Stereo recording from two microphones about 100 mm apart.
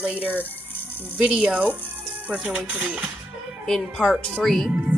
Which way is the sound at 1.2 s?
5° right (ahead or behind).